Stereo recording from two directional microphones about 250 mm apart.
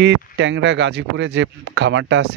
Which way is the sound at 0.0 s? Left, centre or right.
Right.